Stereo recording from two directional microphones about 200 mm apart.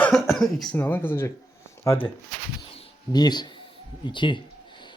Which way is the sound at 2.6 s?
25° left (ahead or behind).